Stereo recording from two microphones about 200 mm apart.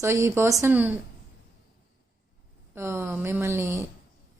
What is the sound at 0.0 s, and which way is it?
Speech, 15° right (ahead or behind).